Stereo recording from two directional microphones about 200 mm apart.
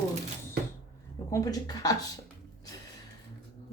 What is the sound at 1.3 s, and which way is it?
Speech, 20° left (ahead or behind).